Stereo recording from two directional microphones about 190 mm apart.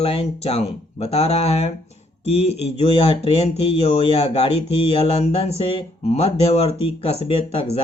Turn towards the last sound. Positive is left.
turn(degrees=30)  # may be behind; listen again after turning